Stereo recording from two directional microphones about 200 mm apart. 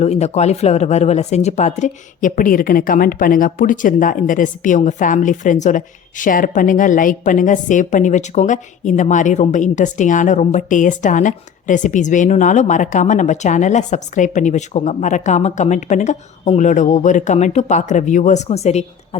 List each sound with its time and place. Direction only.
0.0 s speech: 35° left (ahead or behind)